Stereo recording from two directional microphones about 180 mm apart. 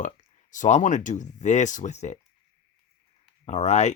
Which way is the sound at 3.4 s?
40° left (ahead or behind).